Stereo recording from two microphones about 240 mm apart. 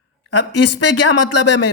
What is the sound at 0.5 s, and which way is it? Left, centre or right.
Speech, left.